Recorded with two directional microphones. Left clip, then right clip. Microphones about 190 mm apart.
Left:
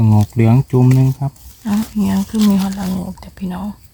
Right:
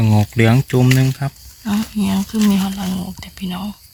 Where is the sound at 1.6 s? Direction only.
30° left (ahead or behind).